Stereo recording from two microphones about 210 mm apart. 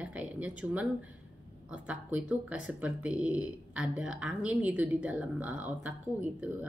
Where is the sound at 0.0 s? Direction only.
5° right (ahead or behind).